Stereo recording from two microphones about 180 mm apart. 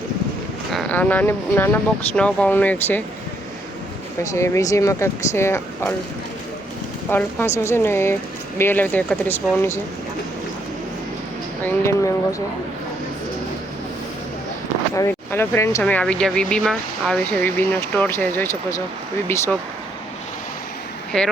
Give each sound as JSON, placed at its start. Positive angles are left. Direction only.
{"t": 0.7, "sound": "speech", "side_deg": 5}
{"t": 4.2, "sound": "speech", "side_deg": 15}
{"t": 7.1, "sound": "speech", "side_deg": 10}
{"t": 11.6, "sound": "speech", "side_deg": 15}
{"t": 14.9, "sound": "speech", "side_deg": 15}
{"t": 21.1, "sound": "speech", "side_deg": 0}